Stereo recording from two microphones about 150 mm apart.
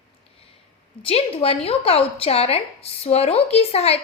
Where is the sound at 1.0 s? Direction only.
40° left (ahead or behind).